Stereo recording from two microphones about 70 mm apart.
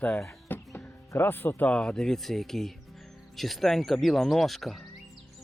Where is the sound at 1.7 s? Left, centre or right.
Centre.